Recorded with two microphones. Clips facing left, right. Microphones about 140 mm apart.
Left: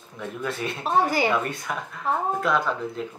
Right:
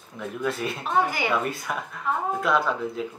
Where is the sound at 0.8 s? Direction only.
35° left (ahead or behind).